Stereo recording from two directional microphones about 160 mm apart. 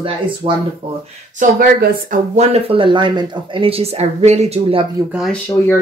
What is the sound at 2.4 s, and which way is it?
Speech, 35° right (ahead or behind).